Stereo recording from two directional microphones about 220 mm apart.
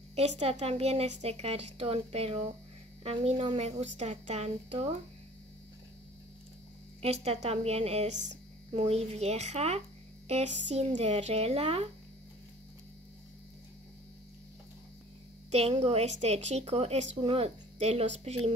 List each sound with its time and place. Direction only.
0.1 s a woman's voice: 30° right (ahead or behind)
7.0 s a woman's voice: 30° right (ahead or behind)
15.5 s a woman's voice: 30° right (ahead or behind)